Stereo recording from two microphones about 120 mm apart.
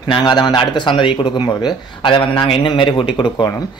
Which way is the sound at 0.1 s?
35° left (ahead or behind).